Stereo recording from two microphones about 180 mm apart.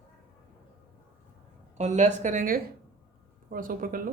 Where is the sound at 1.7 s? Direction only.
40° right (ahead or behind).